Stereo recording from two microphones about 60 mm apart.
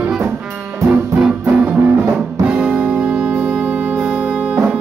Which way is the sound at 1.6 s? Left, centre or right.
Centre.